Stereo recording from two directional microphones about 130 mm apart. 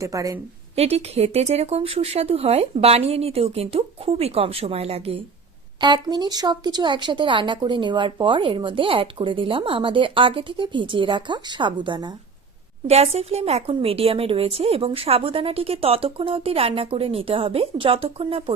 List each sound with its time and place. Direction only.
0.0 s a woman's voice: 25° right (ahead or behind)
0.8 s a woman's voice: 50° right (ahead or behind)
5.8 s speech: 35° right (ahead or behind)
12.9 s a woman's voice: 55° right (ahead or behind)